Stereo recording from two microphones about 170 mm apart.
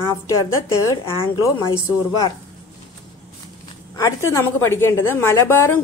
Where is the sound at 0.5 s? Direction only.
15° left (ahead or behind).